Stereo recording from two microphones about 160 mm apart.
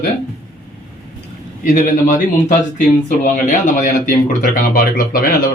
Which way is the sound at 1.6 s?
55° left (ahead or behind).